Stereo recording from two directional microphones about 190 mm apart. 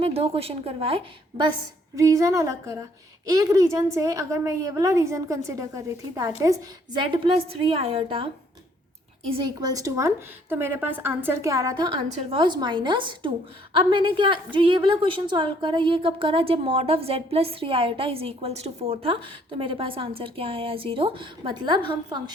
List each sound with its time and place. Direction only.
0.0 s a woman's voice: 30° right (ahead or behind)
2.0 s a woman's voice: 15° right (ahead or behind)
9.3 s a woman's voice: 20° right (ahead or behind)